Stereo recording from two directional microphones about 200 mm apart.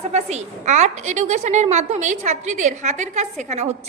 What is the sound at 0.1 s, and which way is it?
A woman's voice, 35° right (ahead or behind).